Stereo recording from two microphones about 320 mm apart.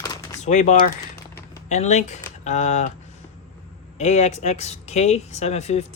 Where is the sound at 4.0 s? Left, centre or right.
Left.